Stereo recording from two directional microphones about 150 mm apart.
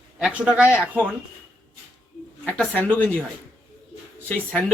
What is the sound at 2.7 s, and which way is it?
Speech, 10° left (ahead or behind).